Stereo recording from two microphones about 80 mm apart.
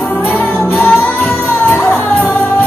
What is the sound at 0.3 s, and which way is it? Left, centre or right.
Music, left.